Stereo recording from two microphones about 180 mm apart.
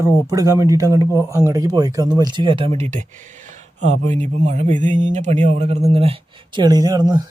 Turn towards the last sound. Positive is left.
turn(degrees=-20)  # may be behind; listen again after turning